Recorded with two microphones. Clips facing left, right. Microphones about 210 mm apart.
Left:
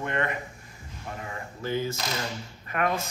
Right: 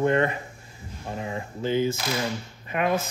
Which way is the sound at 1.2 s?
20° right (ahead or behind).